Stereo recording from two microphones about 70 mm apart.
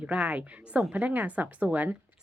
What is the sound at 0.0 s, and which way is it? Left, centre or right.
A woman's voice, centre.